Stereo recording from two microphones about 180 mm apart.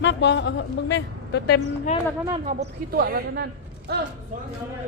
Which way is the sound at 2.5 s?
65° right (ahead or behind).